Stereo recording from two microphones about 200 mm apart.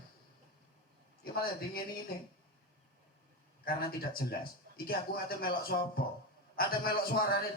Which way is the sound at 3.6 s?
50° left (ahead or behind).